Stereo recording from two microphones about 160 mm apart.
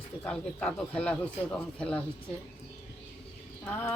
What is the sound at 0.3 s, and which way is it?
Speech, 5° left (ahead or behind).